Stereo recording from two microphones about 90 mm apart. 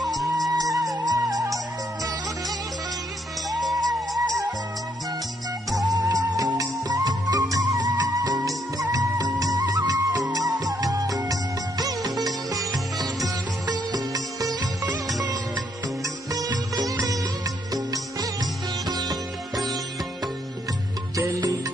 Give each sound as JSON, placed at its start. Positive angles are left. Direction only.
{"t": 0.6, "sound": "music", "side_deg": -40}
{"t": 3.4, "sound": "music", "side_deg": 0}
{"t": 5.7, "sound": "music", "side_deg": -40}
{"t": 8.9, "sound": "music of bollywood", "side_deg": -45}
{"t": 10.3, "sound": "music", "side_deg": -45}
{"t": 12.9, "sound": "music", "side_deg": -45}
{"t": 19.5, "sound": "music", "side_deg": 0}
{"t": 21.2, "sound": "music", "side_deg": -35}